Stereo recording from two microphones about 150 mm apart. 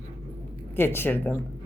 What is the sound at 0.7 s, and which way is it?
Speech, 15° left (ahead or behind).